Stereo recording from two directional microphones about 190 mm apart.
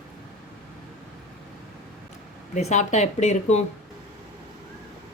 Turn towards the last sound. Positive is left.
turn(degrees=35)  # may be behind; listen again after turning